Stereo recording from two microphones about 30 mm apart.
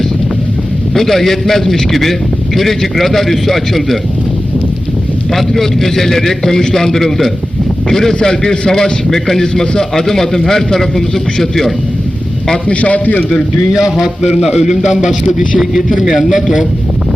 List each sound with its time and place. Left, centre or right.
0.9 s a man's voice: centre
5.3 s a man's voice: centre; by 8.9 s left
9.0 s a man's voice: centre
12.7 s a man's voice: left
14.2 s a man's voice: centre